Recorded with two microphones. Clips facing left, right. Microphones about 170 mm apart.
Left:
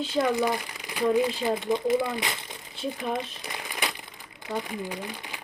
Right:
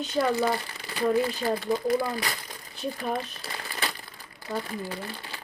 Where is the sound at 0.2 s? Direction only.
15° left (ahead or behind).